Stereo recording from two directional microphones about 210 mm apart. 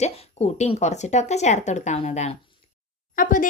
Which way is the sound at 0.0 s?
30° left (ahead or behind).